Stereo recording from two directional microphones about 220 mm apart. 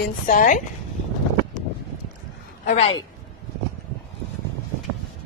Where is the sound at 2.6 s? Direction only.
25° left (ahead or behind).